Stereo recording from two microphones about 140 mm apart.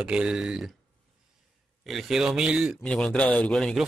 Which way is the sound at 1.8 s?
Centre (ahead or behind).